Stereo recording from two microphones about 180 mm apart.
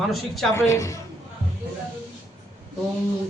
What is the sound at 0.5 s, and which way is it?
Speech, 15° left (ahead or behind).